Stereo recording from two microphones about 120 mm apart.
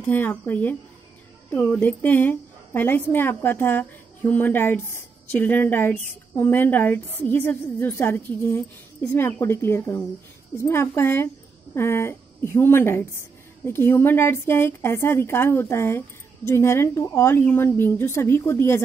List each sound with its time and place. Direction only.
0.0 s a woman's voice: 15° left (ahead or behind)